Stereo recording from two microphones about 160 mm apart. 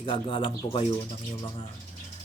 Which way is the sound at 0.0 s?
35° left (ahead or behind).